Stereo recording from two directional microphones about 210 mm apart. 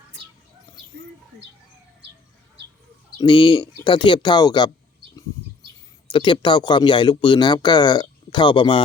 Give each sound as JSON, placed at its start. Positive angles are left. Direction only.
{"t": 3.2, "sound": "speech", "side_deg": 25}
{"t": 6.1, "sound": "speech", "side_deg": 25}